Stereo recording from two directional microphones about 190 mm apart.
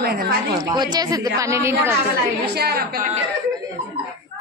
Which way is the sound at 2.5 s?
60° right (ahead or behind).